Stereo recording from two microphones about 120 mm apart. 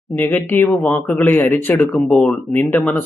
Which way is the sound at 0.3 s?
15° left (ahead or behind).